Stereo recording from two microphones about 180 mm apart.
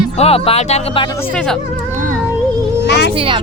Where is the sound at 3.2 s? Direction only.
30° right (ahead or behind).